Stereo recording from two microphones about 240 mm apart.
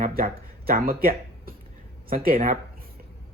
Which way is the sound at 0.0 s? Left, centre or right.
Right.